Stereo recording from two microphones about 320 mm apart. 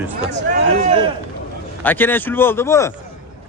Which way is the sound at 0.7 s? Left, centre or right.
Right.